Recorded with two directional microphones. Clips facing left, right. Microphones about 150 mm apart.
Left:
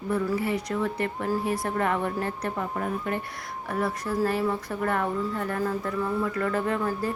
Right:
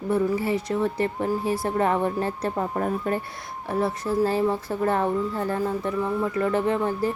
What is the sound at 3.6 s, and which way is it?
Speech, 25° right (ahead or behind).